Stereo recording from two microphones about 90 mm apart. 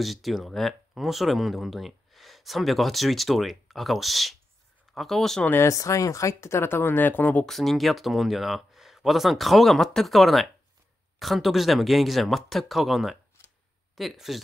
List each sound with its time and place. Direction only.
0.0 s speech: centre (ahead or behind)
5.4 s speech: 25° left (ahead or behind)
5.7 s speech: 35° left (ahead or behind); by 7.4 s 20° left (ahead or behind)
7.4 s speech: centre (ahead or behind)